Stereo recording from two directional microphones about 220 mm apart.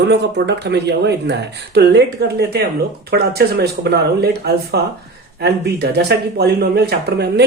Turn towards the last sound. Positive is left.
turn(degrees=-50)  # may be behind; listen again after turning